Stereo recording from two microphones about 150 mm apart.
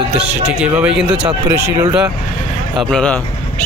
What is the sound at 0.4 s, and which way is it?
Speech, 10° right (ahead or behind).